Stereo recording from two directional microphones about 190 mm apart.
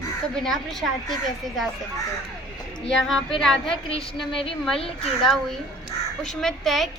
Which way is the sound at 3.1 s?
Centre (ahead or behind).